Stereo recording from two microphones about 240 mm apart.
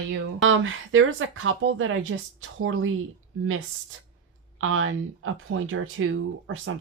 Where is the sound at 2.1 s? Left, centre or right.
Right.